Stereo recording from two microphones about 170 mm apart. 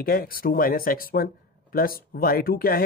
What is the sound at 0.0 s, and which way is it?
Speech, 60° left (ahead or behind).